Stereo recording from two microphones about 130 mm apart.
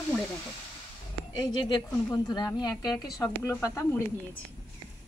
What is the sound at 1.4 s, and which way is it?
A woman's voice, 35° left (ahead or behind).